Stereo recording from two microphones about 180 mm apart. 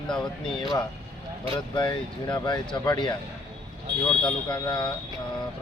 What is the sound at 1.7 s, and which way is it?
Speech, 25° left (ahead or behind).